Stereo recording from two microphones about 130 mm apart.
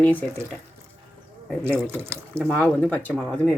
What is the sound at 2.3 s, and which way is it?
Speech, 10° left (ahead or behind).